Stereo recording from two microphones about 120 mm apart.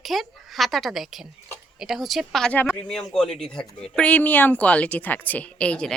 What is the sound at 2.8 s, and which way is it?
Speech, 5° left (ahead or behind).